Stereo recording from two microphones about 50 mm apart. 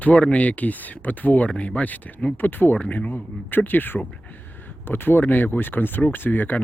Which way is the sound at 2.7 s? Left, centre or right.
Left.